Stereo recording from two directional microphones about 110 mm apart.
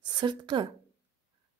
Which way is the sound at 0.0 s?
45° right (ahead or behind).